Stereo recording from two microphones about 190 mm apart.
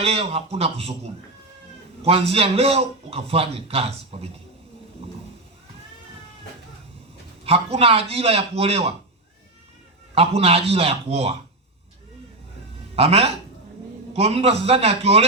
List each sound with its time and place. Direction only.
0.0 s a man's voice: 30° right (ahead or behind)
7.4 s a man's voice: 30° right (ahead or behind)
10.2 s a man's voice: 30° right (ahead or behind)
13.0 s a man's voice: 30° right (ahead or behind)